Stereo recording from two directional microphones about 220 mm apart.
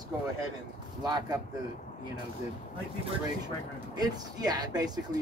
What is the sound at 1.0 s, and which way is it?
Speech, 20° right (ahead or behind).